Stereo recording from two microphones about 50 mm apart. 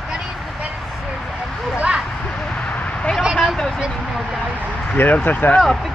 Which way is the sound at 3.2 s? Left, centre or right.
Centre.